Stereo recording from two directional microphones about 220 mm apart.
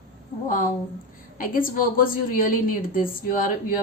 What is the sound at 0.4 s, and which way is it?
A woman's voice, 40° left (ahead or behind).